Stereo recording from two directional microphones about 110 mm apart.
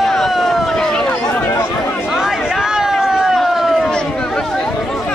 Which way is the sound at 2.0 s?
5° right (ahead or behind).